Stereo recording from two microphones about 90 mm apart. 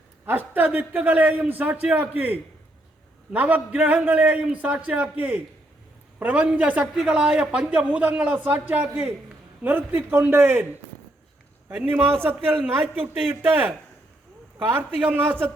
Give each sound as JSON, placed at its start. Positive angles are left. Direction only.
{"t": 0.3, "sound": "a man's voice", "side_deg": -20}
{"t": 11.9, "sound": "a man's voice", "side_deg": -25}